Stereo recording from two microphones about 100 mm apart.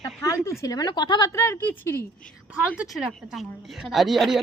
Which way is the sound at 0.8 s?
45° left (ahead or behind).